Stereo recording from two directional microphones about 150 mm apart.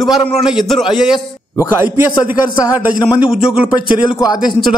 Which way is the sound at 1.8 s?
15° right (ahead or behind).